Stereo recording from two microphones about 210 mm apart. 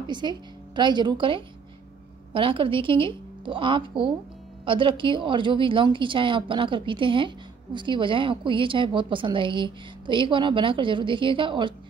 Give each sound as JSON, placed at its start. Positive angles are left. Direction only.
{"t": 0.0, "sound": "a woman's voice", "side_deg": -20}